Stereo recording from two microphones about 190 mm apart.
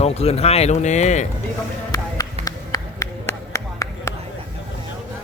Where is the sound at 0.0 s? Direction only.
35° left (ahead or behind).